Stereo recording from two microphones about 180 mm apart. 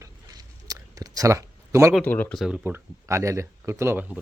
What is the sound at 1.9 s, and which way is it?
Speech, 10° left (ahead or behind).